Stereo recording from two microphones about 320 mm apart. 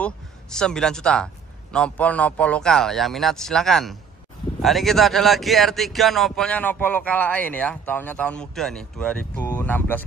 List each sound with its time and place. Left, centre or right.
0.0 s speech: centre